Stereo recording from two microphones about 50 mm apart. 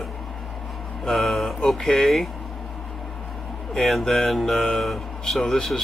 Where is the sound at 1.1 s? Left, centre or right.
Centre.